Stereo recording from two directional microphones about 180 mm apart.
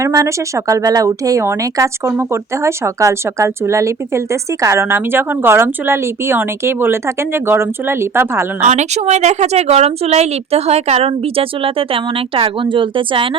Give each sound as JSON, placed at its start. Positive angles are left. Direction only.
{"t": 0.0, "sound": "speech", "side_deg": -15}
{"t": 8.6, "sound": "speech", "side_deg": -40}